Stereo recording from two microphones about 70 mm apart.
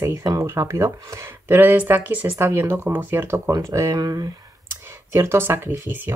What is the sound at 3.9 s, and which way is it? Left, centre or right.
Speech, right.